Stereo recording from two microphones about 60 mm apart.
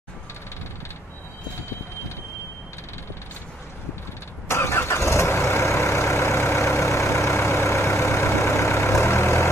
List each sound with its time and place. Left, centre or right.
4.5 s vehicle: left